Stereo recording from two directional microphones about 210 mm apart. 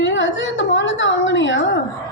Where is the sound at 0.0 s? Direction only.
60° left (ahead or behind).